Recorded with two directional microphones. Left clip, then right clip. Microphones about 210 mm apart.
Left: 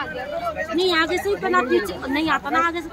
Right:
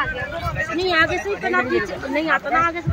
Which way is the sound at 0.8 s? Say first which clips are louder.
Right 1 dB; 45° left (ahead or behind).